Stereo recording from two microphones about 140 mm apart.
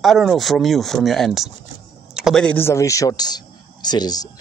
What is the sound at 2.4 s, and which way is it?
Speech, 15° left (ahead or behind).